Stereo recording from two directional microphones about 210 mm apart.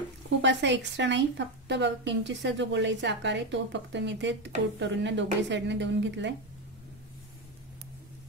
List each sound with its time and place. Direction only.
0.4 s a woman's voice: 60° right (ahead or behind)